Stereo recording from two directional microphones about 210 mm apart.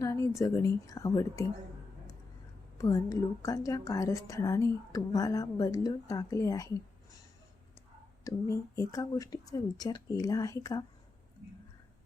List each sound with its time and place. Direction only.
0.0 s speech: 15° left (ahead or behind)
2.7 s a woman's voice: 15° left (ahead or behind)
8.2 s a woman's voice: 15° left (ahead or behind)